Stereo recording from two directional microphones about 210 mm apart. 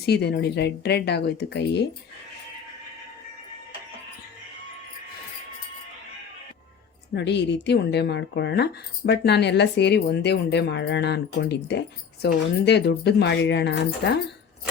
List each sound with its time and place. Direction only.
0.0 s speech: 50° left (ahead or behind)
7.1 s speech: 55° left (ahead or behind)